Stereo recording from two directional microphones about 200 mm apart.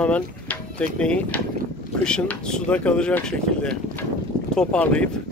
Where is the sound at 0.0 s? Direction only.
5° left (ahead or behind).